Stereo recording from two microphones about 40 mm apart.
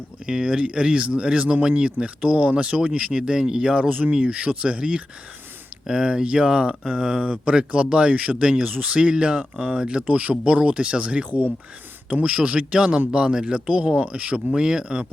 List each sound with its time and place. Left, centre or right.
0.3 s speech: right
3.8 s speech: right
4.3 s speech: right
8.1 s speech: right
8.4 s speech: right
8.6 s speech: right
8.9 s speech: right
10.1 s speech: right
12.7 s speech: right